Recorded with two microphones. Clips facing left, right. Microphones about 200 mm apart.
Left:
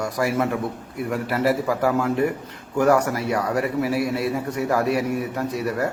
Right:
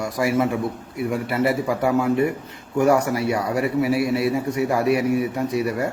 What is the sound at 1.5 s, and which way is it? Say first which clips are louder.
A man's voice: left 2 dB; 10° right (ahead or behind).